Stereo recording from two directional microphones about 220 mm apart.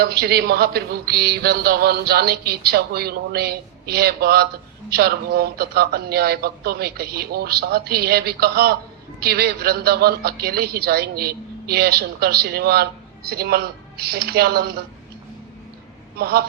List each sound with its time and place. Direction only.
0.0 s a man's voice: 45° right (ahead or behind)
16.1 s a man's voice: 45° right (ahead or behind)